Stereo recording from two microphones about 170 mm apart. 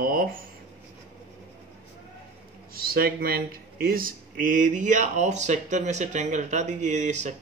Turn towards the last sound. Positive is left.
turn(degrees=-45)  # may be behind; listen again after turning